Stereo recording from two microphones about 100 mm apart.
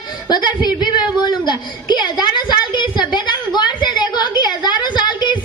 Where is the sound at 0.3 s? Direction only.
45° left (ahead or behind).